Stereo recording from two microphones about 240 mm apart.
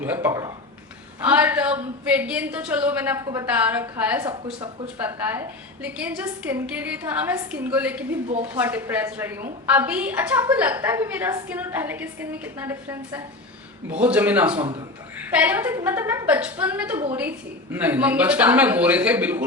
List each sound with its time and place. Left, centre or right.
0.0 s a woman's voice: centre
4.3 s speech: right
4.9 s a woman's voice: centre
14.6 s speech: right
15.2 s a woman's voice: centre